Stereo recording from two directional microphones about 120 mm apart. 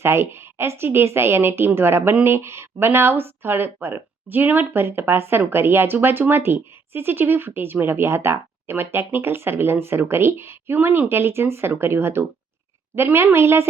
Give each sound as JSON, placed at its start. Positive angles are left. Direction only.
{"t": 0.0, "sound": "speech", "side_deg": -20}